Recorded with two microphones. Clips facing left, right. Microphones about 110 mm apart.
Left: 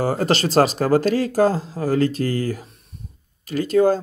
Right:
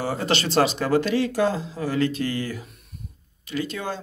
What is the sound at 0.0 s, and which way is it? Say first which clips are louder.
Speech: left 5 dB; 40° left (ahead or behind).